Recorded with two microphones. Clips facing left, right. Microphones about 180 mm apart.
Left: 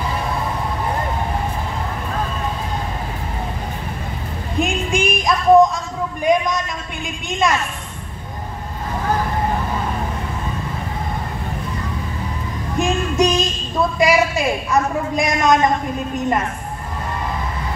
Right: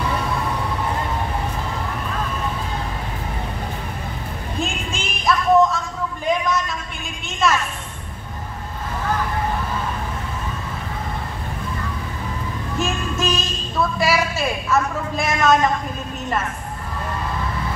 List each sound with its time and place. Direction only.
4.6 s a sound: 15° left (ahead or behind)
7.2 s a woman's voice: 15° left (ahead or behind)
12.7 s a woman's voice: 15° left (ahead or behind)